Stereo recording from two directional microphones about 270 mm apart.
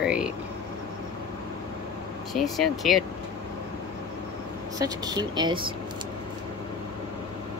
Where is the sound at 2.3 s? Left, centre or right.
Centre.